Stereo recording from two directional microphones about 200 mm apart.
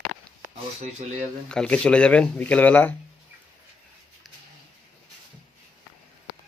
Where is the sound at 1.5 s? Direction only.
5° left (ahead or behind).